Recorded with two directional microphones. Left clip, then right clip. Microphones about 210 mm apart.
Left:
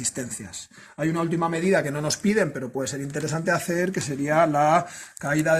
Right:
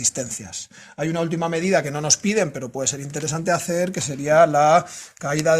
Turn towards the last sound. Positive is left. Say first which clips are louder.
# right 3 dB
turn(degrees=-50)  # may be behind; listen again after turning